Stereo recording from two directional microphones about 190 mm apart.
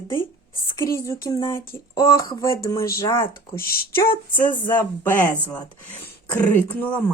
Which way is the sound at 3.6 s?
50° left (ahead or behind).